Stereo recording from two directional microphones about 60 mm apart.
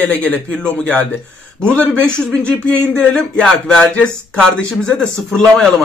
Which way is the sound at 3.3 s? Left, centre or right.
Centre.